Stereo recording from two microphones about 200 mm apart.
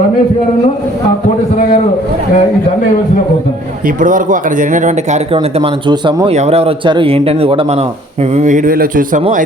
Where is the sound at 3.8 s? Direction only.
40° right (ahead or behind).